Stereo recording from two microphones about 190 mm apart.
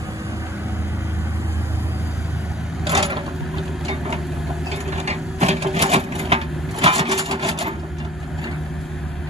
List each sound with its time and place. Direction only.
2.8 s a sound: 30° right (ahead or behind)
4.9 s printer: 35° right (ahead or behind)
7.3 s sewing machine: 30° right (ahead or behind)